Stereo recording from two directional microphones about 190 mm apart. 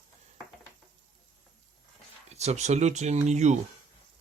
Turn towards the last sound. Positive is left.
turn(degrees=-35)  # may be behind; listen again after turning